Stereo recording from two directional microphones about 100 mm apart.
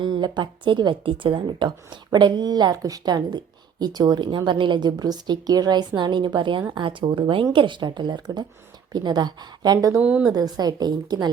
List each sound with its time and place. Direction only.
0.0 s a woman's voice: 50° right (ahead or behind)
10.0 s a woman's voice: 15° right (ahead or behind)
10.3 s a woman's voice: 40° right (ahead or behind)